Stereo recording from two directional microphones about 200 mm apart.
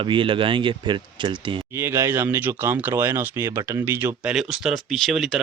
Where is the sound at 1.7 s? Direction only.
15° right (ahead or behind).